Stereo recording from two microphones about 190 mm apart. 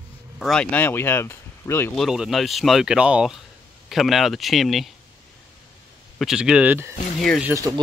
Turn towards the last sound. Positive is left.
turn(degrees=-20)  # may be behind; listen again after turning